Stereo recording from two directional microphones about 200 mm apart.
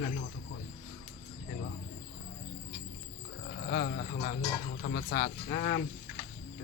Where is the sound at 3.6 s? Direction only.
50° left (ahead or behind).